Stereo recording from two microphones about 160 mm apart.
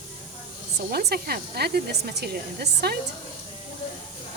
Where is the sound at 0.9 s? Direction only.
75° right (ahead or behind).